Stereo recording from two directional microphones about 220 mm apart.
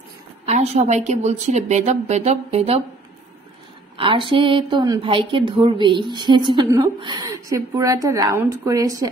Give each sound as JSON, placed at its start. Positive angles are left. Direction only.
{"t": 0.5, "sound": "a woman's voice", "side_deg": -30}
{"t": 4.0, "sound": "a woman's voice", "side_deg": -25}